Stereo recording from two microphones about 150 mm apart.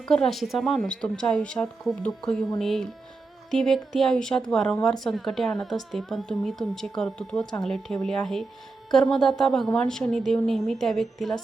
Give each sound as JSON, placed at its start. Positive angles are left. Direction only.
{"t": 0.0, "sound": "a woman's voice", "side_deg": 5}